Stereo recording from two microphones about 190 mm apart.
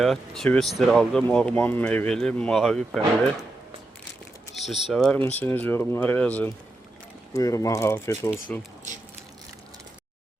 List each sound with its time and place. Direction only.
0.0 s speech: centre (ahead or behind)
4.5 s a sound: centre (ahead or behind)
4.9 s speech: centre (ahead or behind)